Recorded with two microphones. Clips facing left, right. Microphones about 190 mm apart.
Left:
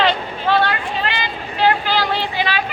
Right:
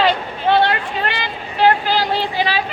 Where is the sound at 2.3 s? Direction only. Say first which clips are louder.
Right 2 dB; 35° right (ahead or behind).